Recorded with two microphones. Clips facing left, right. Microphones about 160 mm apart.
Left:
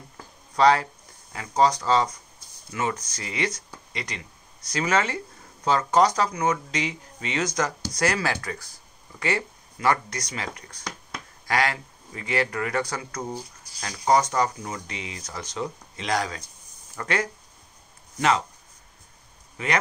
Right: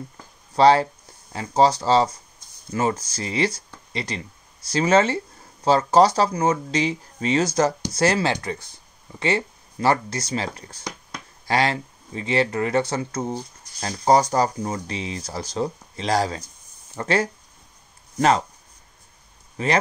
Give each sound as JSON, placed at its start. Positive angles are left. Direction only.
{"t": 0.6, "sound": "speech", "side_deg": -30}
{"t": 13.7, "sound": "speech", "side_deg": -35}
{"t": 19.5, "sound": "speech", "side_deg": -30}